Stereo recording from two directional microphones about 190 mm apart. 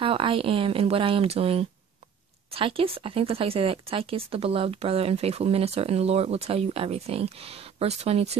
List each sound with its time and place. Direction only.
0.0 s speech: 30° right (ahead or behind)